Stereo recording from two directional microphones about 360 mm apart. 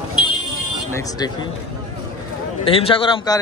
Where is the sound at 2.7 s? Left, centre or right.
Centre.